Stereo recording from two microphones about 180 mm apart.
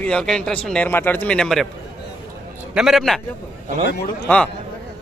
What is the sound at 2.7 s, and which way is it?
Speech, centre (ahead or behind).